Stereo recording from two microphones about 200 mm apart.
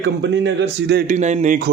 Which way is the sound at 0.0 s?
60° right (ahead or behind).